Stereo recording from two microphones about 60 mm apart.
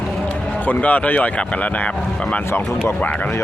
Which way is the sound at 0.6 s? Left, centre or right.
Left.